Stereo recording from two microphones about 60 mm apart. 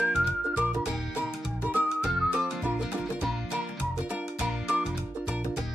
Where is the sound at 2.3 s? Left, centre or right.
Centre.